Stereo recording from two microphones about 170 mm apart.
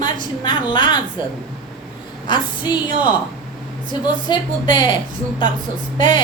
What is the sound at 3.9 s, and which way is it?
A woman's voice, 25° left (ahead or behind).